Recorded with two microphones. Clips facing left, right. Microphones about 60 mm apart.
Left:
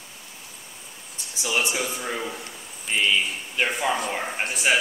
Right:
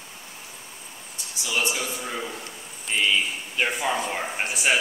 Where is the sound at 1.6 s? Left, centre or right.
Centre.